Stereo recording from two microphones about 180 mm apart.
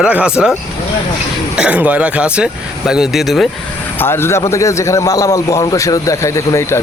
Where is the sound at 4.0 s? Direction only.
15° left (ahead or behind).